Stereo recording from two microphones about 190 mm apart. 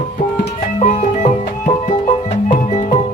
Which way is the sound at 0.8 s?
40° left (ahead or behind).